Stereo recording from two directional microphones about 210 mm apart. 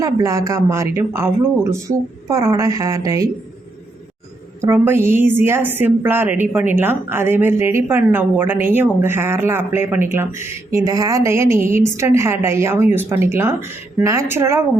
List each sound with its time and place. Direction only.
0.0 s a woman's voice: 15° right (ahead or behind)
4.6 s a woman's voice: 10° right (ahead or behind)